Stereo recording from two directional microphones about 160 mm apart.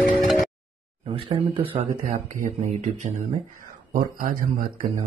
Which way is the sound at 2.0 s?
55° right (ahead or behind).